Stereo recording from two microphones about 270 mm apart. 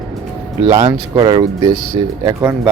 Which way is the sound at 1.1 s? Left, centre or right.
Centre.